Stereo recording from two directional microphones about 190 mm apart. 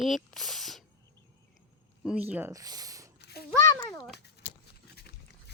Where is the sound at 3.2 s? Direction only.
60° left (ahead or behind).